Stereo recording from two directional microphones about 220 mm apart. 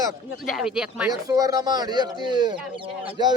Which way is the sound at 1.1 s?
15° right (ahead or behind).